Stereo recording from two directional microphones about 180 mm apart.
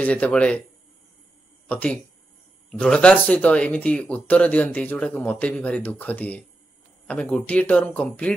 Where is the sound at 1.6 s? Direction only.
10° left (ahead or behind).